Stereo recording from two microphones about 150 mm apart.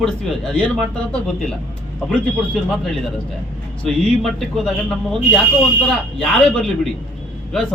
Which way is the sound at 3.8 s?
Centre (ahead or behind).